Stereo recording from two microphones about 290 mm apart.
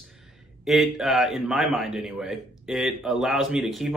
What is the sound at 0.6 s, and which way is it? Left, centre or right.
A man's voice, centre.